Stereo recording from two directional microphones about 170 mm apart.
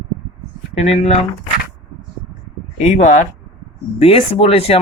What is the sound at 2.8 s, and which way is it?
Speech, 45° left (ahead or behind).